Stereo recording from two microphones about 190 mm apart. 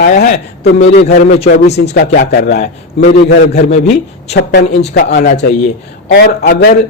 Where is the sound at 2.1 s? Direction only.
50° left (ahead or behind).